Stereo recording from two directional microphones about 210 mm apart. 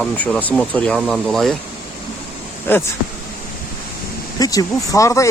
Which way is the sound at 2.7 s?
10° left (ahead or behind).